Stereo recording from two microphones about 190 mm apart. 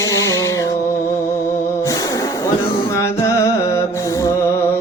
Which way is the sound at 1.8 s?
20° left (ahead or behind).